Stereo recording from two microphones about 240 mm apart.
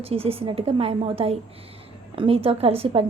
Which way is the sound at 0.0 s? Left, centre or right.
Right.